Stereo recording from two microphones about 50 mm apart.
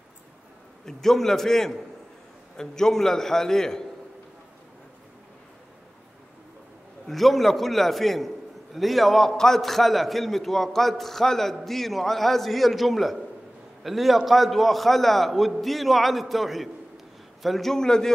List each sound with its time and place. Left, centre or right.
0.8 s a man's voice: centre
7.1 s a man's voice: centre